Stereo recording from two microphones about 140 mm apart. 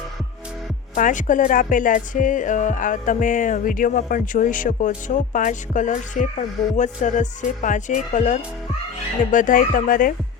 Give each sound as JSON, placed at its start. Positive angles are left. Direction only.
{"t": 0.9, "sound": "speech", "side_deg": 65}